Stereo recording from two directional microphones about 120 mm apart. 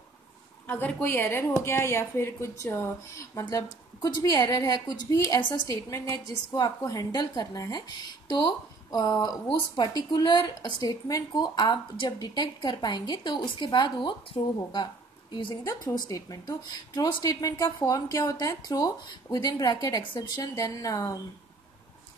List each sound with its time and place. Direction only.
0.7 s a woman's voice: 15° left (ahead or behind); by 5.8 s 35° left (ahead or behind)
5.9 s a woman's voice: 25° left (ahead or behind); by 14.5 s 40° left (ahead or behind)
15.6 s a woman's voice: 25° left (ahead or behind)